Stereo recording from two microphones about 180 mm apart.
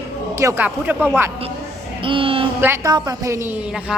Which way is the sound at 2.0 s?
30° right (ahead or behind).